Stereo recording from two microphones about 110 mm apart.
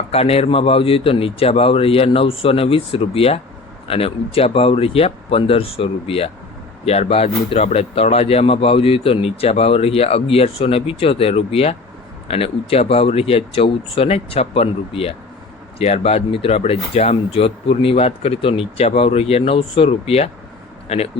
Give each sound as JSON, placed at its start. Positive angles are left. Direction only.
{"t": 0.1, "sound": "speech", "side_deg": 65}